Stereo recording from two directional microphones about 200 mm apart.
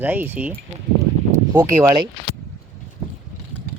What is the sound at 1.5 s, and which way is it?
Speech, 15° right (ahead or behind).